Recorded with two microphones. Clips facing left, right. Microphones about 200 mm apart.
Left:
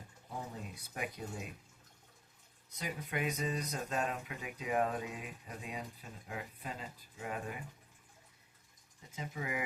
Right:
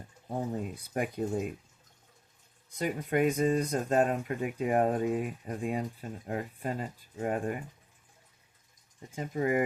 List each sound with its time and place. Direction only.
0.9 s speech: 50° right (ahead or behind)
2.7 s speech: 50° right (ahead or behind)
9.0 s speech: 50° right (ahead or behind)